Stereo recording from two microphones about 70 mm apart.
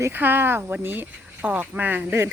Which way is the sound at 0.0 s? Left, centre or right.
Right.